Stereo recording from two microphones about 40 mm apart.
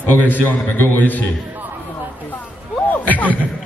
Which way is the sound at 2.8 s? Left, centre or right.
Left.